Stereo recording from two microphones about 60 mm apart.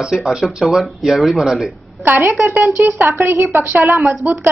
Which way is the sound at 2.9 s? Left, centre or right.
Right.